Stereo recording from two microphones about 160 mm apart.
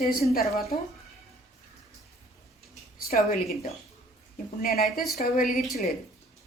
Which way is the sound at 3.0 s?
65° left (ahead or behind).